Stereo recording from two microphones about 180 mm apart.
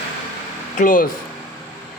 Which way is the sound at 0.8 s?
50° left (ahead or behind).